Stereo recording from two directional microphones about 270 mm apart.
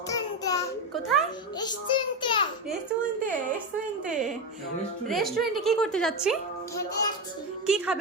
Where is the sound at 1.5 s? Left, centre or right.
Centre.